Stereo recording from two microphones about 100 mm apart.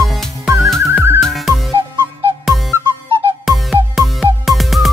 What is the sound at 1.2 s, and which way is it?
Music, centre (ahead or behind).